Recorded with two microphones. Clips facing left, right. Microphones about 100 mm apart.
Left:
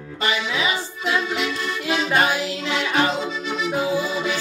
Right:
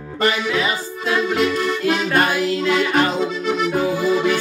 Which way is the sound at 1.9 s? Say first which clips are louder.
Right 1 dB; 50° right (ahead or behind).